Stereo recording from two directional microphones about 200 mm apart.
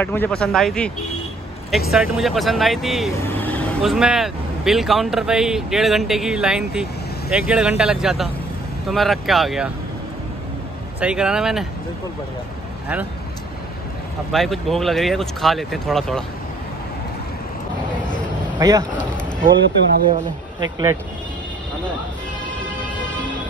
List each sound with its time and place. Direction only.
0.0 s speech: 10° left (ahead or behind)
11.0 s speech: 5° right (ahead or behind)
14.3 s speech: centre (ahead or behind)
18.6 s speech: 20° right (ahead or behind)
20.6 s speech: 15° right (ahead or behind)